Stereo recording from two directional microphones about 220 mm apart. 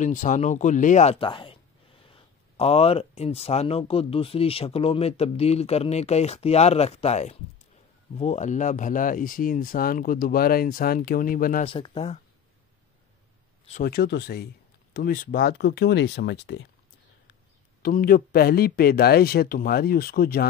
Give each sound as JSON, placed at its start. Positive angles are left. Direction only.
{"t": 0.0, "sound": "speech", "side_deg": 35}
{"t": 11.6, "sound": "speech", "side_deg": 25}
{"t": 13.8, "sound": "speech", "side_deg": 45}
{"t": 17.8, "sound": "speech", "side_deg": 40}